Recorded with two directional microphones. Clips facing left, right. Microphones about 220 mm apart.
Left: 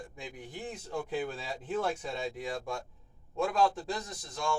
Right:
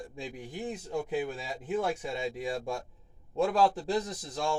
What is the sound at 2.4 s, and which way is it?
A man's voice, 30° right (ahead or behind).